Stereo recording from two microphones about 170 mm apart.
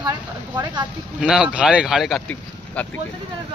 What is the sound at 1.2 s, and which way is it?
Speech, 5° right (ahead or behind).